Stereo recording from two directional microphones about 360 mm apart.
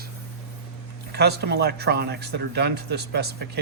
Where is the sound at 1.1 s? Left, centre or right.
Right.